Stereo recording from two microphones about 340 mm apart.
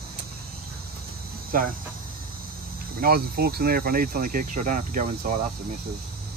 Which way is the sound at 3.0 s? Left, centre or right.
Right.